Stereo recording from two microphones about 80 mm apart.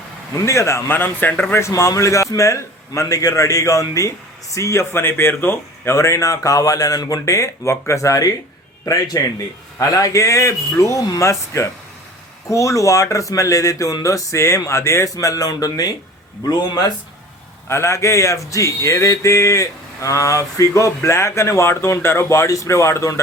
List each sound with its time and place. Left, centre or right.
0.4 s speech: left
0.9 s a man's voice: left
1.6 s a man's voice: left
15.1 s speech: left
17.7 s speech: left